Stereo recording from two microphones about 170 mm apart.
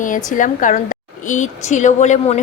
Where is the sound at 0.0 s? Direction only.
50° left (ahead or behind).